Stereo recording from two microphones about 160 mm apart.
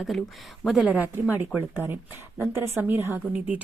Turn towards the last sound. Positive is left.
turn(degrees=-10)  # may be behind; listen again after turning